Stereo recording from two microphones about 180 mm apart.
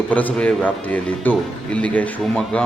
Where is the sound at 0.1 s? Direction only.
10° left (ahead or behind).